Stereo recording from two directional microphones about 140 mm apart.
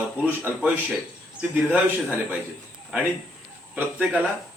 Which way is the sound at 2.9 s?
10° right (ahead or behind).